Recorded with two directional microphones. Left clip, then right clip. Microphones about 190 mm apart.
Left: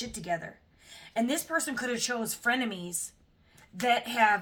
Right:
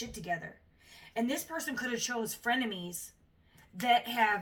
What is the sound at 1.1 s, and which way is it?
Speech, 40° left (ahead or behind).